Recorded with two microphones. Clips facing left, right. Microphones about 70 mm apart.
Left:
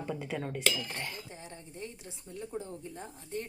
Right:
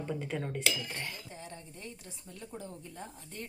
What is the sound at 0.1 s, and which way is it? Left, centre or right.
Speech, centre.